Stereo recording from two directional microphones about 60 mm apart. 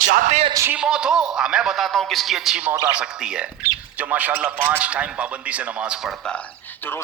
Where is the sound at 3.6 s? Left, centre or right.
Right.